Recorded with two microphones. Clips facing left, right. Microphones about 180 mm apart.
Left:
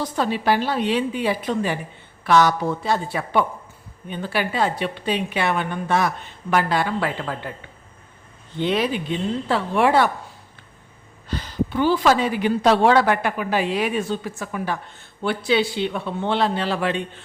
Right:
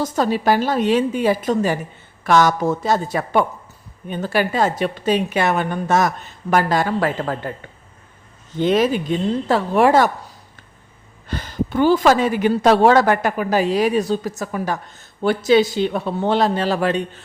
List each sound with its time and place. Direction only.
0.0 s speech: 40° right (ahead or behind)
8.5 s speech: 45° right (ahead or behind)